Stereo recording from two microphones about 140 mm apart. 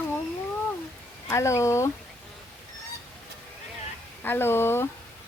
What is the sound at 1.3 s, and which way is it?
Speech, 20° left (ahead or behind).